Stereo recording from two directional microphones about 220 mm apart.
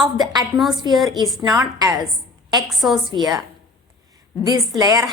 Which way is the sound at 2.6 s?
Centre (ahead or behind).